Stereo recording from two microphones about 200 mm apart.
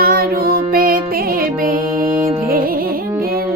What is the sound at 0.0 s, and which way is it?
Music, 50° right (ahead or behind).